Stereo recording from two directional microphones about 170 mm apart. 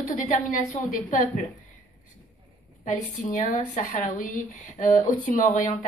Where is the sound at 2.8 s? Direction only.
50° left (ahead or behind).